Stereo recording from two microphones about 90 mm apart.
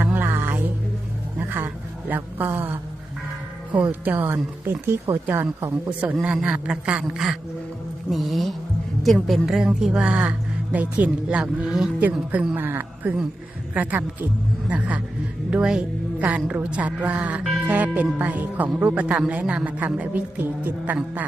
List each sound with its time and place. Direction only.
0.0 s music: 20° right (ahead or behind)
1.4 s a sound: 20° right (ahead or behind)
3.8 s speech: 20° right (ahead or behind)
6.2 s a woman's voice: 10° right (ahead or behind)
8.1 s music: centre (ahead or behind)
9.0 s a woman's voice: centre (ahead or behind); by 21.2 s 20° right (ahead or behind)